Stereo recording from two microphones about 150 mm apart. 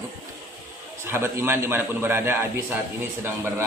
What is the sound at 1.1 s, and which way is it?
A man's voice, 15° right (ahead or behind).